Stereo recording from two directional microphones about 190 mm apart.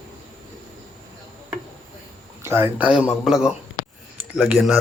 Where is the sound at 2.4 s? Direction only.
10° right (ahead or behind).